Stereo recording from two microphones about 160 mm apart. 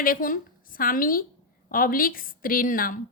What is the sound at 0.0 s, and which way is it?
A woman's voice, 60° left (ahead or behind).